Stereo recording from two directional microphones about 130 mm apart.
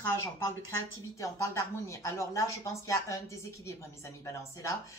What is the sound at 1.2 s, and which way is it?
Speech, 25° left (ahead or behind).